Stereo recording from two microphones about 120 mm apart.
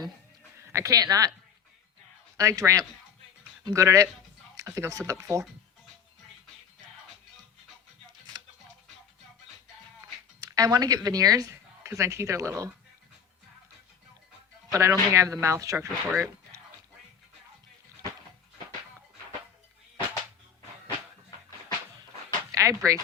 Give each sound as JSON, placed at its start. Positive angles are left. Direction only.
{"t": 0.7, "sound": "speech", "side_deg": -25}
{"t": 2.4, "sound": "speech", "side_deg": -25}
{"t": 10.4, "sound": "speech", "side_deg": -30}
{"t": 14.7, "sound": "speech", "side_deg": -25}
{"t": 22.5, "sound": "speech", "side_deg": -25}